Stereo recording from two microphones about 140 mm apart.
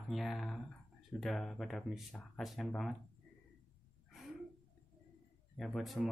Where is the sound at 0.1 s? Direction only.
Centre (ahead or behind).